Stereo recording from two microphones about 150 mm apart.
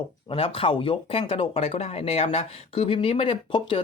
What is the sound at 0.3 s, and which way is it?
Speech, 40° left (ahead or behind).